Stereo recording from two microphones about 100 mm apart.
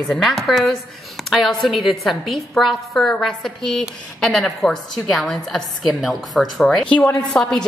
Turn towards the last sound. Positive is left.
turn(degrees=5)  # may be behind; listen again after turning